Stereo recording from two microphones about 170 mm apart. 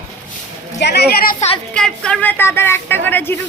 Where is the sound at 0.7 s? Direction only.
85° left.